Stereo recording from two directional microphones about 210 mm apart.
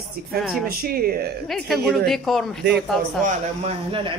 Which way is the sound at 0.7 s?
45° right (ahead or behind).